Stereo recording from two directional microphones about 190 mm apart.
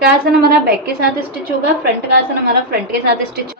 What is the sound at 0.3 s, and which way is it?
Speech, 55° right (ahead or behind).